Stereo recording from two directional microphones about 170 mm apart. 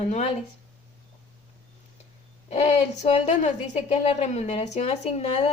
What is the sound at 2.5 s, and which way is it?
A woman's voice, 35° left (ahead or behind).